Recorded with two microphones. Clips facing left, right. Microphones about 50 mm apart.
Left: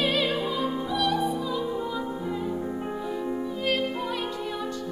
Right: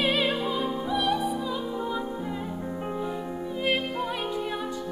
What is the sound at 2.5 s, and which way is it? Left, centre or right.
Music, centre.